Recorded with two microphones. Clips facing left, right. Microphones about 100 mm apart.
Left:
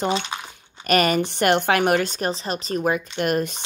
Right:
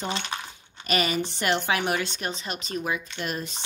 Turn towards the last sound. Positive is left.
turn(degrees=60)  # may be behind; listen again after turning